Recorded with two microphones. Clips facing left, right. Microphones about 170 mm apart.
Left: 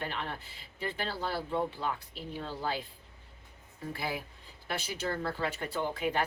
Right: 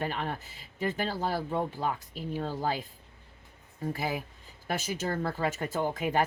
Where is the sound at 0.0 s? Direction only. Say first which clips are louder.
Right 4 dB; 45° right (ahead or behind).